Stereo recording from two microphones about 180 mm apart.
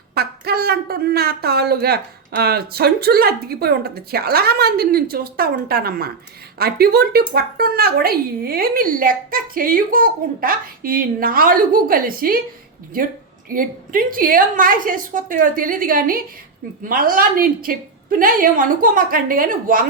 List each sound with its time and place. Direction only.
0.1 s speech: 60° right (ahead or behind)
13.5 s speech: 50° right (ahead or behind)